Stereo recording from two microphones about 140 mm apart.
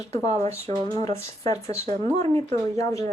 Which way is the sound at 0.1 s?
25° left (ahead or behind).